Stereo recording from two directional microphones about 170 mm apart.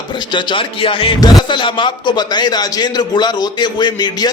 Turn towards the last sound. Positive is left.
turn(degrees=25)  # may be behind; listen again after turning